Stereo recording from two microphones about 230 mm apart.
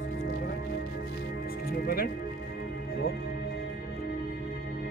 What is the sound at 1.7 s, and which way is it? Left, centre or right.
Music, left.